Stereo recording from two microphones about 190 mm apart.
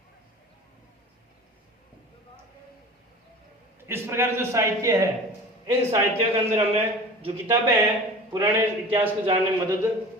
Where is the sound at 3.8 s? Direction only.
15° right (ahead or behind).